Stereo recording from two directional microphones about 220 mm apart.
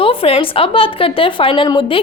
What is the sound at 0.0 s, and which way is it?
A woman's voice, 25° left (ahead or behind).